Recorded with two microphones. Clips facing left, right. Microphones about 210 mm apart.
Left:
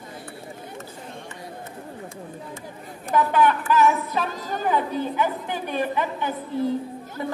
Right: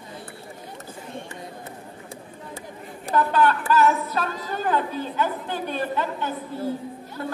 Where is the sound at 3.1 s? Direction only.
15° left (ahead or behind).